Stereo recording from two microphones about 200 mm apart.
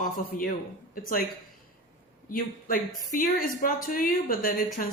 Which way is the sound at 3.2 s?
45° left (ahead or behind).